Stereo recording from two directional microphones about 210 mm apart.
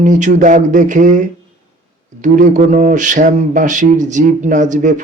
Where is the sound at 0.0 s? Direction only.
35° right (ahead or behind).